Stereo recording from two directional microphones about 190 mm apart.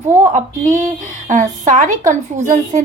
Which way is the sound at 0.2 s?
40° right (ahead or behind).